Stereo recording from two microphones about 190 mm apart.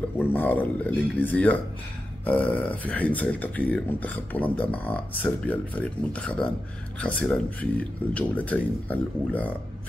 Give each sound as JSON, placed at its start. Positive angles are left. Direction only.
{"t": 0.2, "sound": "speech", "side_deg": 10}